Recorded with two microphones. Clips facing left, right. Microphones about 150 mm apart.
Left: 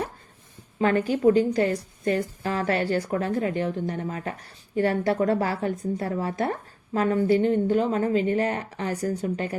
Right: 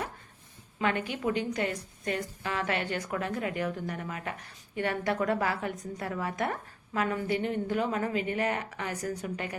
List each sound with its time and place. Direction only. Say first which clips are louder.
0.8 s a woman's voice: left 8 dB; 40° left (ahead or behind)